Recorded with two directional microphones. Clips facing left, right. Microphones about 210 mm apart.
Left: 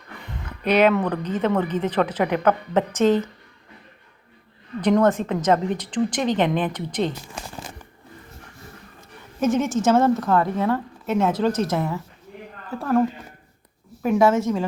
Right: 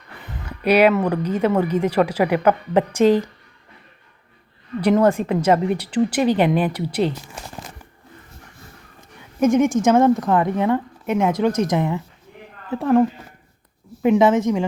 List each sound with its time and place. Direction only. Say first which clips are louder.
0.3 s a sound: right 4 dB; 10° right (ahead or behind)
1.0 s a woman's voice: right 3 dB; 10° right (ahead or behind)
4.8 s a woman's voice: right 2 dB; 10° right (ahead or behind)
9.4 s a woman's voice: right 4 dB; 15° right (ahead or behind)
14.0 s a woman's voice: right 3 dB; 20° right (ahead or behind)